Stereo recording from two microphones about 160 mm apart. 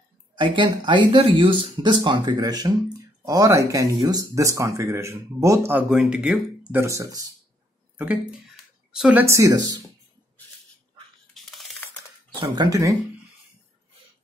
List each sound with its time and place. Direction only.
0.4 s speech: 30° right (ahead or behind)
8.0 s speech: 10° right (ahead or behind)
9.2 s speech: 20° right (ahead or behind)
11.3 s a sound: centre (ahead or behind)
12.4 s speech: 25° right (ahead or behind)